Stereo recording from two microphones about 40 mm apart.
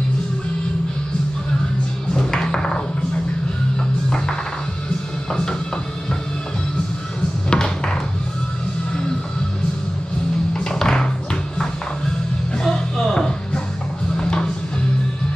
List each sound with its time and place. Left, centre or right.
2.1 s music: centre
5.3 s music: centre
7.4 s a sound: centre
10.5 s music: centre
12.5 s music: centre